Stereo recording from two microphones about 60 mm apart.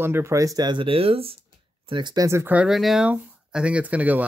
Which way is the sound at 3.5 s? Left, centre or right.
Centre.